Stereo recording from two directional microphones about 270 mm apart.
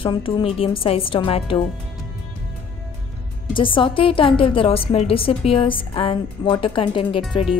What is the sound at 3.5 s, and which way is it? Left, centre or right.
A woman's voice, centre.